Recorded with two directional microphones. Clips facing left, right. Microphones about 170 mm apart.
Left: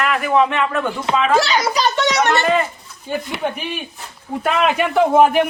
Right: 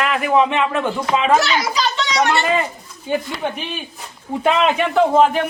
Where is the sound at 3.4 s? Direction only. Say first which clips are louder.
Left 1 dB; 5° left (ahead or behind).